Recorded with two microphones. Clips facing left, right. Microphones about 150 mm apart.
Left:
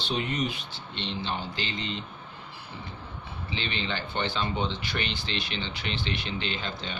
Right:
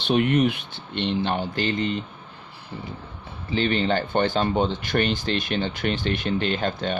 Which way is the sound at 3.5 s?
45° right (ahead or behind).